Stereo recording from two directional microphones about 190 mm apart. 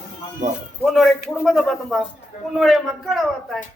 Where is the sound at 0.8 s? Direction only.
Centre (ahead or behind).